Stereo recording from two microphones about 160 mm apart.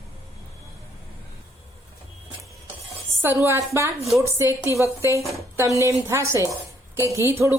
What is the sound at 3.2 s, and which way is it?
A woman's voice, 15° right (ahead or behind).